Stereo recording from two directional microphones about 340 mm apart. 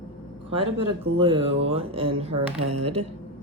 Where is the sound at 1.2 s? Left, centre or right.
Centre.